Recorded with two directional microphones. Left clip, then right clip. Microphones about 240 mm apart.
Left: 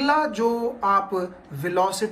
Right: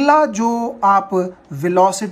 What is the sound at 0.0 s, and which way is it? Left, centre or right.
Speech, right.